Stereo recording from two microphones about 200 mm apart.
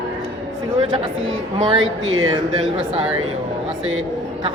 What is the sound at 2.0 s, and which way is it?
Speech, 85° right.